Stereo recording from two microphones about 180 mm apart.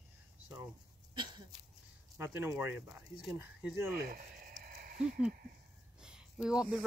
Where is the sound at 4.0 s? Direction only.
55° right (ahead or behind).